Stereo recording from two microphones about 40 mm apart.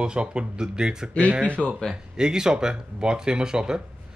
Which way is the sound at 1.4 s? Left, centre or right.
Left.